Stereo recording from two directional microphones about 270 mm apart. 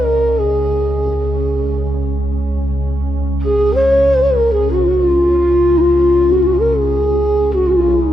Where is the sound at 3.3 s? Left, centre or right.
Centre.